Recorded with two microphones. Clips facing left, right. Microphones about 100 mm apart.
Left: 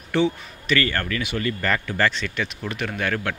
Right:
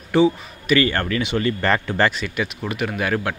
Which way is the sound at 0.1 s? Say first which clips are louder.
Right 5 dB; 10° right (ahead or behind).